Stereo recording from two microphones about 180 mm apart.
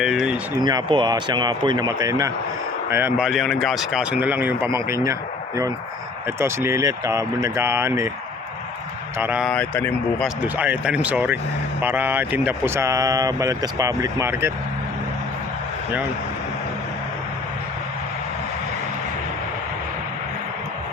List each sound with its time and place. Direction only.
0.0 s speech: 5° right (ahead or behind)
0.6 s speech: 25° right (ahead or behind)
3.2 s speech: centre (ahead or behind)
6.2 s speech: 15° right (ahead or behind)
9.1 s speech: 10° right (ahead or behind)
9.4 s speech: 5° left (ahead or behind)
10.2 s speech: 10° right (ahead or behind)